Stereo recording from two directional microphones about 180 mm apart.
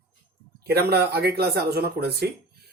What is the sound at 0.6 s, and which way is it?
Speech, 60° right (ahead or behind).